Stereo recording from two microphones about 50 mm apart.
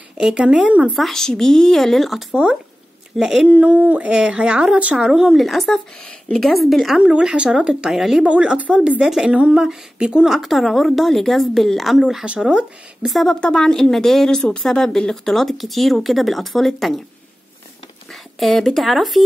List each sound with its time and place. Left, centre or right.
0.3 s speech: centre
0.9 s speech: centre
3.2 s speech: centre
3.4 s speech: right; by 7.0 s centre
7.0 s speech: centre
8.3 s speech: right; by 12.3 s centre
12.3 s speech: right
13.1 s speech: centre
13.4 s speech: centre
18.1 s speech: centre